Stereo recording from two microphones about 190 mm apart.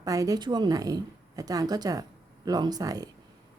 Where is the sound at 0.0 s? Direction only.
20° right (ahead or behind).